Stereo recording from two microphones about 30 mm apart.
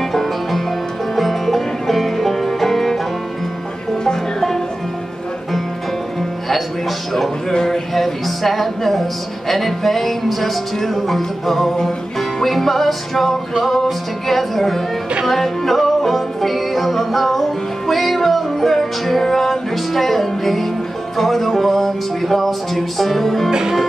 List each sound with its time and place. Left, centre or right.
0.0 s music: centre
7.6 s music: centre